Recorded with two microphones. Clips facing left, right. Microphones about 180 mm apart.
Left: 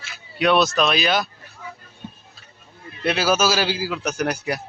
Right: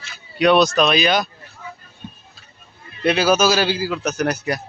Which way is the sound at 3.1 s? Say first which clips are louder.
Right 4 dB; 5° left (ahead or behind).